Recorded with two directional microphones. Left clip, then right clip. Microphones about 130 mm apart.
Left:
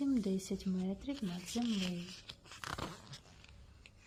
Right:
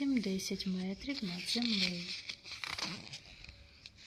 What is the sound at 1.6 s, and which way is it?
Speech, 45° left (ahead or behind).